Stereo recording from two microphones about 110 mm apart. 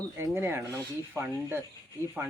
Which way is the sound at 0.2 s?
20° right (ahead or behind).